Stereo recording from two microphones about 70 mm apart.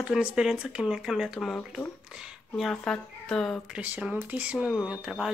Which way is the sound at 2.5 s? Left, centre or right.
Centre.